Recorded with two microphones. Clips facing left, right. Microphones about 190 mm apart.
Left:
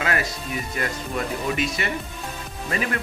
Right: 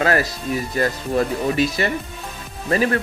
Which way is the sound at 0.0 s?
35° right (ahead or behind).